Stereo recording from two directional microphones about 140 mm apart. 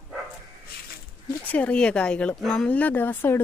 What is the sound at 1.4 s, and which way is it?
Speech, 10° left (ahead or behind).